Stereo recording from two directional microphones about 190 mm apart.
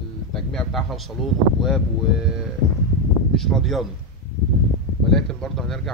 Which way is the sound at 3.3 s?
Centre (ahead or behind).